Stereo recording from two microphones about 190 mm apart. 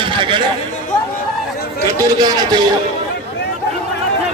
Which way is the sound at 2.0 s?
20° right (ahead or behind).